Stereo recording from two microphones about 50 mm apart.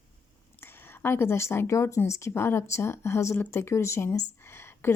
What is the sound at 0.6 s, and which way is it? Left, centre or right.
Speech, left.